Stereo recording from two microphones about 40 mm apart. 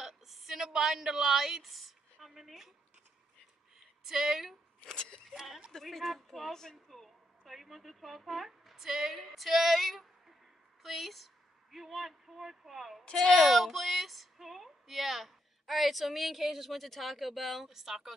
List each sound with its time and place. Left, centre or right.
0.0 s a sound: centre
0.7 s a woman's voice: centre
4.0 s a woman's voice: centre
4.8 s speech: centre
5.3 s a woman's voice: centre
5.7 s speech: centre
7.4 s speech: centre
13.1 s speech: centre
13.5 s a woman's voice: centre